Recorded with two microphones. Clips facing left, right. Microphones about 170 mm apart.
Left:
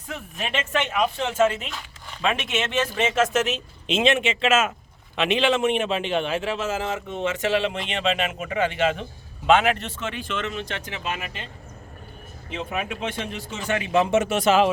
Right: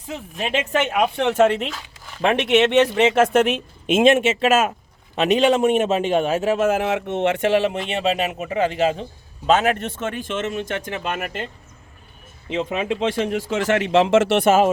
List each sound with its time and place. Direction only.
0.1 s speech: 35° right (ahead or behind)
0.7 s a man's voice: 45° right (ahead or behind)
12.5 s speech: 85° right; by 14.7 s 50° right (ahead or behind)